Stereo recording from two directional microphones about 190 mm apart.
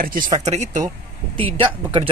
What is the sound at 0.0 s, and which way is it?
Speech, 45° right (ahead or behind).